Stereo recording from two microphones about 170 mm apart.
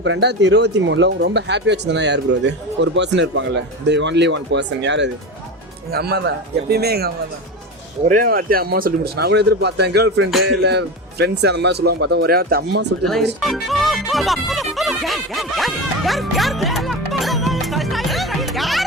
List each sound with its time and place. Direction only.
0.0 s speech: 90° right
5.9 s speech: 70° right (ahead or behind)
8.0 s speech: 55° right (ahead or behind)
13.4 s speech: centre (ahead or behind)